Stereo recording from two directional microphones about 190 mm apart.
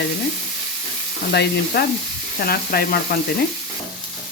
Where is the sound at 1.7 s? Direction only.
60° left (ahead or behind).